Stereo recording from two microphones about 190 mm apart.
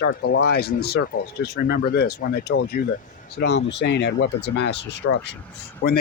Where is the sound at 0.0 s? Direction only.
60° left (ahead or behind).